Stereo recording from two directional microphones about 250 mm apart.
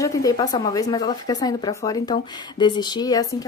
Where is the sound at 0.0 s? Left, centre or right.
Centre.